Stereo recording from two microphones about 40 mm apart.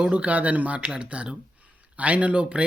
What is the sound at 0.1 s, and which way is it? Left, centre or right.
Speech, right.